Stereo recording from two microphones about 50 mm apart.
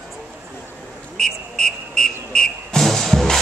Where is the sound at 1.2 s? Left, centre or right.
Centre.